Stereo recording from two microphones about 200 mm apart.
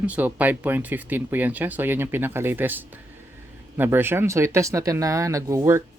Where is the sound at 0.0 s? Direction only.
5° right (ahead or behind).